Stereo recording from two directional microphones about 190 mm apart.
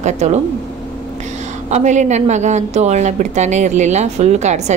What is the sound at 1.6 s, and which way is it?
A woman's voice, 40° right (ahead or behind).